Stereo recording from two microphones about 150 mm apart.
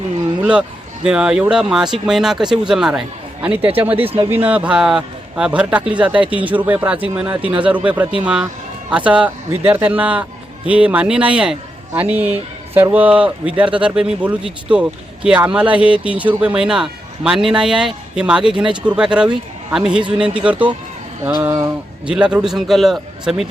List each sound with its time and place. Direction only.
1.0 s a man's voice: 5° right (ahead or behind)
21.4 s speech: 20° right (ahead or behind)
22.0 s a man's voice: 5° right (ahead or behind)